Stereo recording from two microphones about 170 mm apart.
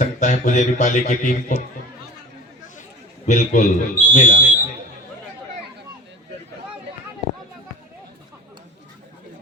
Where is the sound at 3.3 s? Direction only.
50° left (ahead or behind).